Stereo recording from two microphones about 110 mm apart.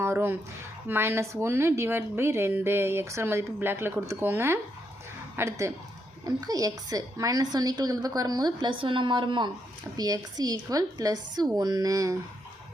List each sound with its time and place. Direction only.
0.0 s a woman's voice: 20° right (ahead or behind); by 9.5 s 45° right (ahead or behind)
10.0 s a woman's voice: 35° right (ahead or behind)